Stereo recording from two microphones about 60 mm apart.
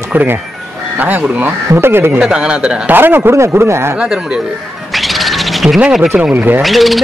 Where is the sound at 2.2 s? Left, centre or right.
Centre.